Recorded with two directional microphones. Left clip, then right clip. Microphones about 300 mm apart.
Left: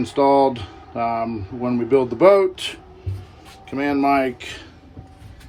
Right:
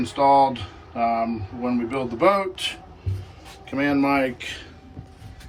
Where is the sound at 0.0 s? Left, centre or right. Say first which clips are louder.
Left 1 dB; left.